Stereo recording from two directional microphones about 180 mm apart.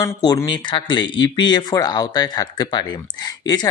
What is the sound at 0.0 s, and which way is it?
Speech, 20° left (ahead or behind).